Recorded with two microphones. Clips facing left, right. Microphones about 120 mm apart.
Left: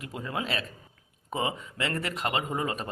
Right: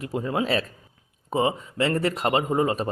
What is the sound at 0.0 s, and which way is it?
Speech, 30° right (ahead or behind).